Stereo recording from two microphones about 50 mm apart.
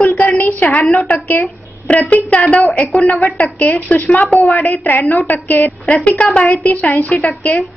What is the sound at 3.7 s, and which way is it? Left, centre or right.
A woman's voice, left.